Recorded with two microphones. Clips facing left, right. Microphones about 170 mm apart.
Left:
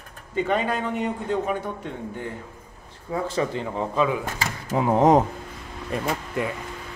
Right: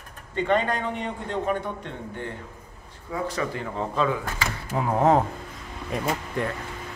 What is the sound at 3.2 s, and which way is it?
A man's voice, 25° left (ahead or behind).